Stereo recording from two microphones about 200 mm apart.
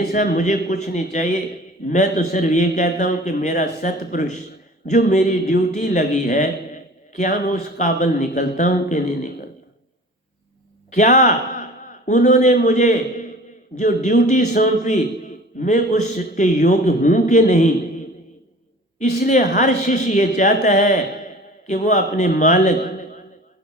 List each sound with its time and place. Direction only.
0.1 s a man's voice: 40° left (ahead or behind)
10.9 s a man's voice: 40° left (ahead or behind)
18.9 s a man's voice: 35° left (ahead or behind)